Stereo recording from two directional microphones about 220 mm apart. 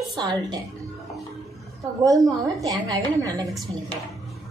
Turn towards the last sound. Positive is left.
turn(degrees=-20)  # may be behind; listen again after turning